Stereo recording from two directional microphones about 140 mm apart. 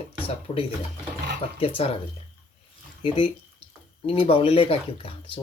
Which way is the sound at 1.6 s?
45° left (ahead or behind).